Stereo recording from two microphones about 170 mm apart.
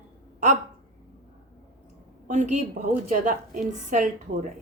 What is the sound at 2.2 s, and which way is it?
A woman's voice, 45° right (ahead or behind).